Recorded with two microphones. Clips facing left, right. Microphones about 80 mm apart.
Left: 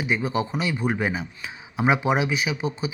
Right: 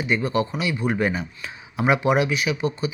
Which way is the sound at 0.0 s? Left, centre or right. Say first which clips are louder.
Right 2 dB; centre.